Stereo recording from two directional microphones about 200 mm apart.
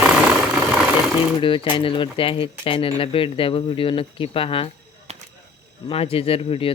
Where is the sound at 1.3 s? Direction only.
25° left (ahead or behind).